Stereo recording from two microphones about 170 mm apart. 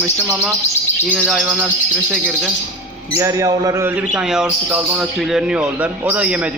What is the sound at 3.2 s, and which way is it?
Speech, 20° right (ahead or behind).